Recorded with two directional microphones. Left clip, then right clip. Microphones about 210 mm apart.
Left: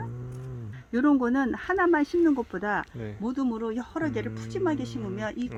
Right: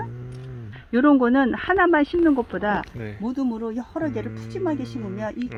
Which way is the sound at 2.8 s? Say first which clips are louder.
Right 3 dB; 5° left (ahead or behind).